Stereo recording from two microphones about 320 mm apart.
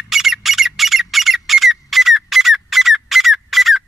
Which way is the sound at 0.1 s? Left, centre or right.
Centre.